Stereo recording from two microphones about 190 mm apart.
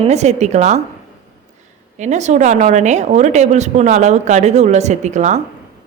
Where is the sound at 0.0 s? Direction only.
35° right (ahead or behind).